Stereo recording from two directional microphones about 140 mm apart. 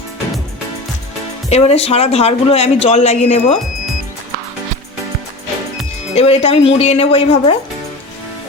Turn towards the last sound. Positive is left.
turn(degrees=45)  # may be behind; listen again after turning